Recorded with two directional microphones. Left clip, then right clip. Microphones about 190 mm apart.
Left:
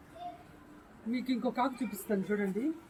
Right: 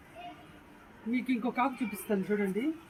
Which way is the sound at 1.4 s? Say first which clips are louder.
Even; 10° left (ahead or behind).